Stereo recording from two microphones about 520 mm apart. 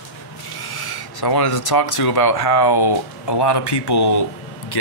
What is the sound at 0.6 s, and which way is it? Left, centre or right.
Speech, left.